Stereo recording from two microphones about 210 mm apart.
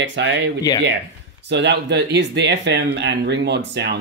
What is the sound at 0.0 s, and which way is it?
Speech, 55° right (ahead or behind).